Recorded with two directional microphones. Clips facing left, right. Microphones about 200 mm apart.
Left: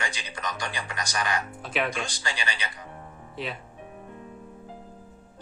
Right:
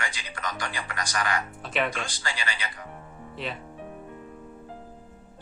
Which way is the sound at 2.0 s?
20° left (ahead or behind).